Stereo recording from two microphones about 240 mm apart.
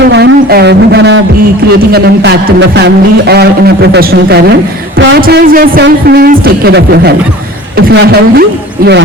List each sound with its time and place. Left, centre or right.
0.1 s a man's voice: right